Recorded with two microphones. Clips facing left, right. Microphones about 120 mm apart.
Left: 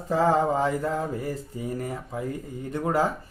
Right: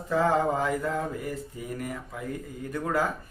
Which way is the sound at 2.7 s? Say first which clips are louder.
Left 3 dB; 25° left (ahead or behind).